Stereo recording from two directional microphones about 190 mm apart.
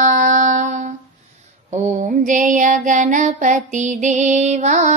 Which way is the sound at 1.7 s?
40° right (ahead or behind).